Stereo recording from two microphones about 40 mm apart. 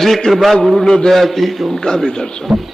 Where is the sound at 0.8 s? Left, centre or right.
Centre.